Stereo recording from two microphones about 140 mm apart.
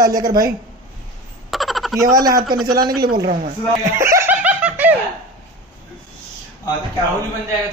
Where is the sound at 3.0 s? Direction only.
90° right.